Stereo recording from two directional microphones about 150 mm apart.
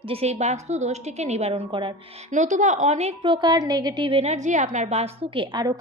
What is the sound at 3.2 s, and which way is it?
A woman's voice, 30° right (ahead or behind).